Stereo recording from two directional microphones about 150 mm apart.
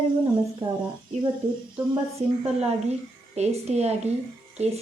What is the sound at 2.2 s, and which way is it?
Speech, 45° right (ahead or behind).